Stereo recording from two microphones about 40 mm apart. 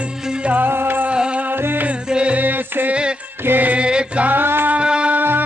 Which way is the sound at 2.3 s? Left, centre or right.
Right.